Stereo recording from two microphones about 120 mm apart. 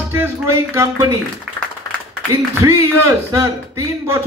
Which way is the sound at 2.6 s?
20° right (ahead or behind).